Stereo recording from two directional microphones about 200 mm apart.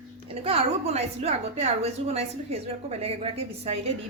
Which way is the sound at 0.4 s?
30° right (ahead or behind).